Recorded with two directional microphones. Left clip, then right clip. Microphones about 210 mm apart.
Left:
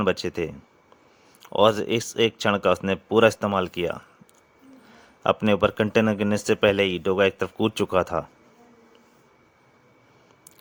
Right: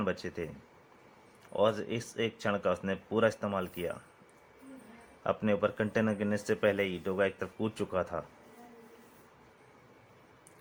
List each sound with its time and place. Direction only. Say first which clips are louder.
0.0 s speech: left 11 dB; 45° left (ahead or behind)
5.2 s speech: left 9 dB; 45° left (ahead or behind)